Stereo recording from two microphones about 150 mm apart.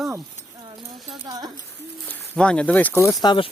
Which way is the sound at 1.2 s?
25° right (ahead or behind).